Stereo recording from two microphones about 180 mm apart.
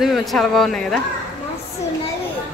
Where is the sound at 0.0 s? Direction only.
Centre (ahead or behind).